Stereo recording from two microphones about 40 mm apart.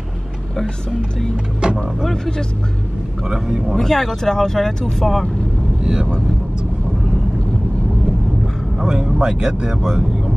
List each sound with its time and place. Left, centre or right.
1.3 s speech: right
2.0 s speech: centre
3.3 s speech: centre
3.7 s speech: centre
8.8 s speech: centre